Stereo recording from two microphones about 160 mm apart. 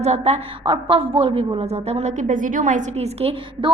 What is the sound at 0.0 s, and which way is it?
A woman's voice, 40° right (ahead or behind).